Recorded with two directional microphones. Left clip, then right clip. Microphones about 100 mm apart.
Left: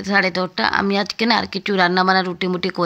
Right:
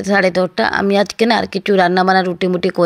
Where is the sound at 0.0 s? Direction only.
45° right (ahead or behind).